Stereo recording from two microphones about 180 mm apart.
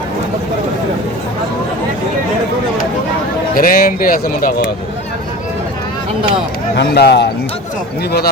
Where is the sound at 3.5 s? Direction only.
55° left (ahead or behind).